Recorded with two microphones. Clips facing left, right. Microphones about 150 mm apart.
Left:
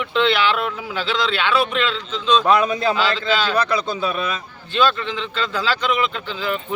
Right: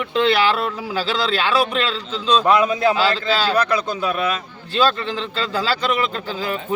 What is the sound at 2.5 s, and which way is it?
Speech, 10° right (ahead or behind).